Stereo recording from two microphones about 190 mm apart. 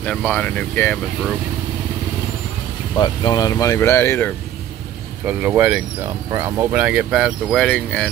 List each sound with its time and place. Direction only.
0.0 s speech: 5° left (ahead or behind)
3.0 s speech: 20° left (ahead or behind)
5.2 s speech: 10° right (ahead or behind)
7.6 s speech: 5° left (ahead or behind)